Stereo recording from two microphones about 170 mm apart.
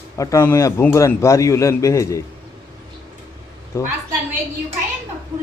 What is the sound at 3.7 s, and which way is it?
Speech, 15° left (ahead or behind).